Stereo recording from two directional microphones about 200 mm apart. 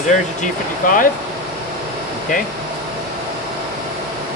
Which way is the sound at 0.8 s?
45° left (ahead or behind).